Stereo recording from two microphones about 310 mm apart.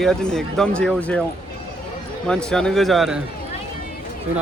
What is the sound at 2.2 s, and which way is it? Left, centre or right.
Speech, centre.